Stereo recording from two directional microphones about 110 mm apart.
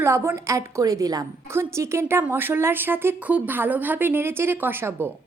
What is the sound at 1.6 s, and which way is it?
A woman's voice, 25° right (ahead or behind).